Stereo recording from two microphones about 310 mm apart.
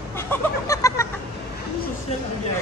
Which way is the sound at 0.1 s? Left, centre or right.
Centre.